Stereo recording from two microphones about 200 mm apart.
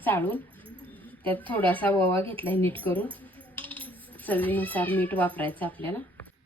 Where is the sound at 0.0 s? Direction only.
10° left (ahead or behind).